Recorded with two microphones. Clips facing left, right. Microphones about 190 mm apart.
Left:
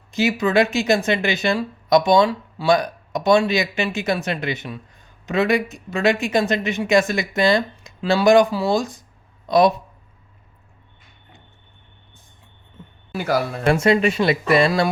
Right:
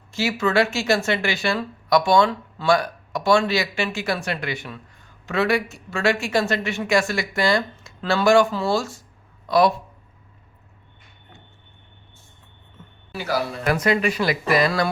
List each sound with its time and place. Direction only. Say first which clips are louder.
0.1 s speech: left 3 dB; 15° left (ahead or behind)
13.1 s speech: left 4 dB; 50° left (ahead or behind)
13.7 s speech: left 4 dB; 25° left (ahead or behind)